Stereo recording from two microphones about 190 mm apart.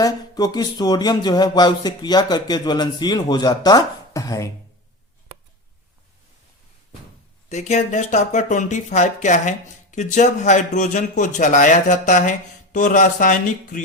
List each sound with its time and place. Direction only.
0.0 s speech: 20° left (ahead or behind)
7.5 s speech: 35° left (ahead or behind)